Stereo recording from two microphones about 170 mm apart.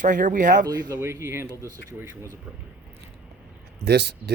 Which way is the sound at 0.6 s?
20° right (ahead or behind).